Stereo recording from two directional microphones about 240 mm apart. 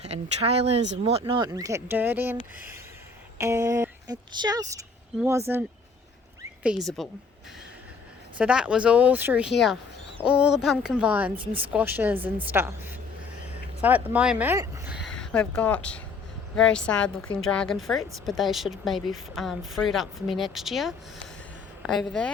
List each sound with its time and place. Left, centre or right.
0.0 s speech: right; by 7.1 s centre
8.4 s a woman's voice: centre